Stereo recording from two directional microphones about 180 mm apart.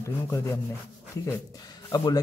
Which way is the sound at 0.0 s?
15° left (ahead or behind).